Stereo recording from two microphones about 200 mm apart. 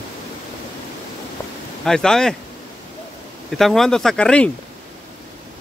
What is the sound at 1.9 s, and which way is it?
Speech, 5° left (ahead or behind).